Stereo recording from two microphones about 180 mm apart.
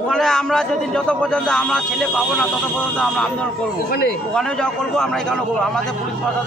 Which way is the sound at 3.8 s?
60° left (ahead or behind).